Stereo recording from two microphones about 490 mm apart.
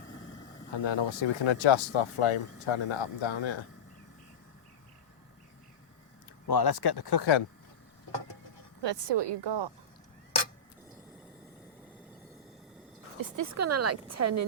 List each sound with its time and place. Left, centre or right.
0.7 s speech: left
6.5 s speech: left
8.8 s a woman's voice: right
13.3 s a woman's voice: right